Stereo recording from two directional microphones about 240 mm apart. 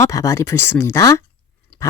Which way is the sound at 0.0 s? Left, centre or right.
Centre.